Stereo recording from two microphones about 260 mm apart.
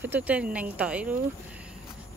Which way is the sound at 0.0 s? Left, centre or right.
Centre.